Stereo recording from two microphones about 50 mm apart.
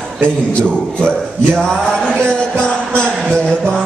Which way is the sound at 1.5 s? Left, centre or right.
Centre.